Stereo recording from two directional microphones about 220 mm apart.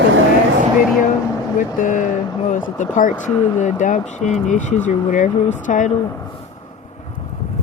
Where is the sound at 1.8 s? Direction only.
35° left (ahead or behind).